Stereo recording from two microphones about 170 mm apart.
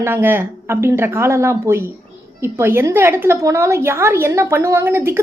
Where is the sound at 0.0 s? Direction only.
15° right (ahead or behind).